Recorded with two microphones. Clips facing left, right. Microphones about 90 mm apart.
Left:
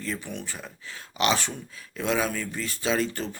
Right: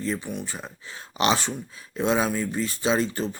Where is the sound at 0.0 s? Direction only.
25° right (ahead or behind).